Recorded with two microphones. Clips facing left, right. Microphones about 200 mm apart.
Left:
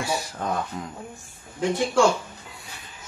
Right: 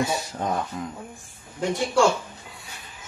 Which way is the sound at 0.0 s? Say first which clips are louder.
Right 2 dB; 20° right (ahead or behind).